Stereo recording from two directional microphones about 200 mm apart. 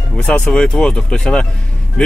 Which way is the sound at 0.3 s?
5° left (ahead or behind).